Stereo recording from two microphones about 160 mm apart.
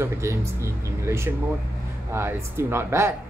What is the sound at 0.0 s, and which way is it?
A woman's voice, 15° right (ahead or behind).